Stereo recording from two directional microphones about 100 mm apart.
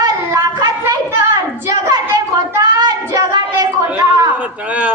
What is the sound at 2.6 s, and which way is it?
Child singing, 45° right (ahead or behind).